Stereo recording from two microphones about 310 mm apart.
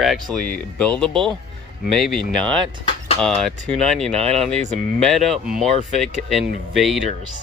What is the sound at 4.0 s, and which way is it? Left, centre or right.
Speech, centre.